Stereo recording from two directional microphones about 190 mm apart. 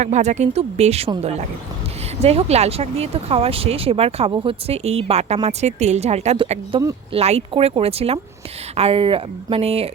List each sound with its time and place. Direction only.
0.0 s speech: 40° right (ahead or behind)